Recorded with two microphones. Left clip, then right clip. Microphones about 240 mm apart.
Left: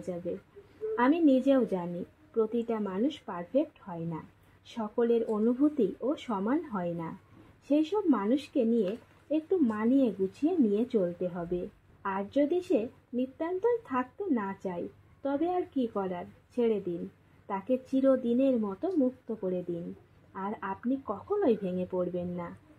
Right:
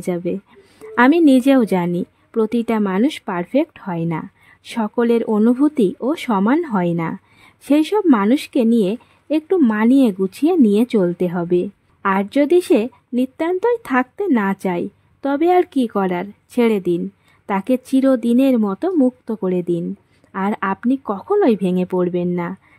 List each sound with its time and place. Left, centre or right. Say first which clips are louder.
0.9 s a woman's voice: right 13 dB; right